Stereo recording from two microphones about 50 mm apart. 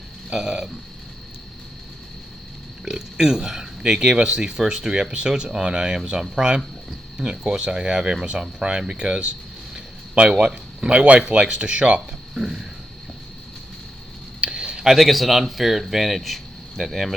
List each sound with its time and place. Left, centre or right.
0.3 s speech: centre
2.8 s speech: centre
12.3 s speech: centre
14.4 s a sound: centre
14.8 s speech: centre